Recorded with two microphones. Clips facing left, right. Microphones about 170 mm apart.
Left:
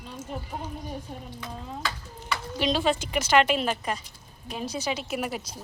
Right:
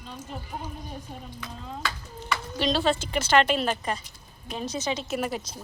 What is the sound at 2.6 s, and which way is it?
A woman's voice, 10° left (ahead or behind).